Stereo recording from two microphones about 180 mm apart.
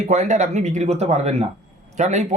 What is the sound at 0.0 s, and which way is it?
Speech, 40° right (ahead or behind).